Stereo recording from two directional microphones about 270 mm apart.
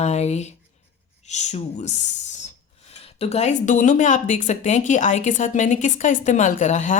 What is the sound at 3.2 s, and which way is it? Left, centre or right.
Speech, left.